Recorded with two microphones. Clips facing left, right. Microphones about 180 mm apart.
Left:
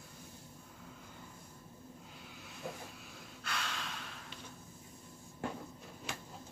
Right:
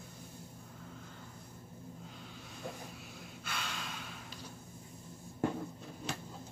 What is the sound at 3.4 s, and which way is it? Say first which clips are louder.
Gasp: left 1 dB; centre (ahead or behind).